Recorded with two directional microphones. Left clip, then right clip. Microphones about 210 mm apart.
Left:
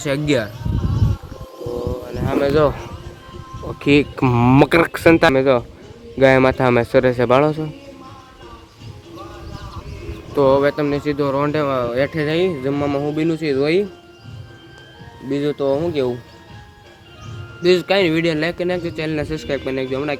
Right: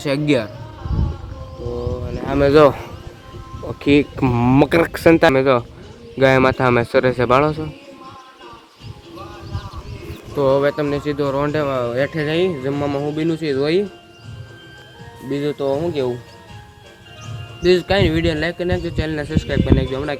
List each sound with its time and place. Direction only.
0.0 s speech: 10° right (ahead or behind)
2.4 s speech: 40° right (ahead or behind)
3.6 s speech: centre (ahead or behind)
10.3 s speech: 25° left (ahead or behind)
10.6 s speech: 10° left (ahead or behind)
15.3 s speech: 10° left (ahead or behind)
17.6 s speech: 10° left (ahead or behind)